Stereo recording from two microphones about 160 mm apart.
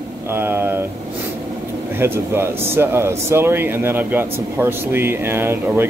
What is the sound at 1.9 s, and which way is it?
Speech, 15° right (ahead or behind).